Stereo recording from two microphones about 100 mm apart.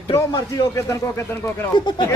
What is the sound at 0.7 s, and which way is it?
Speech, 30° left (ahead or behind).